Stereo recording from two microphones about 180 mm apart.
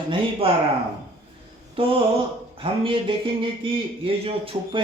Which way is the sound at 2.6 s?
30° right (ahead or behind).